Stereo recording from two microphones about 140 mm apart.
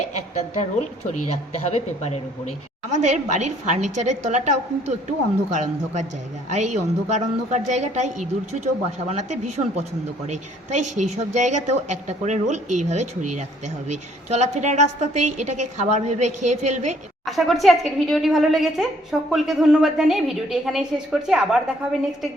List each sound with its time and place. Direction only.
0.3 s a woman's voice: 55° left (ahead or behind)
2.9 s a woman's voice: 55° right (ahead or behind)
10.9 s a woman's voice: 55° right (ahead or behind)
17.2 s a woman's voice: centre (ahead or behind)